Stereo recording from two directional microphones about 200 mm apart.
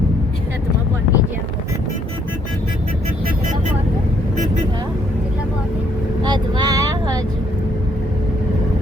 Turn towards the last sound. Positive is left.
turn(degrees=-20)  # may be behind; listen again after turning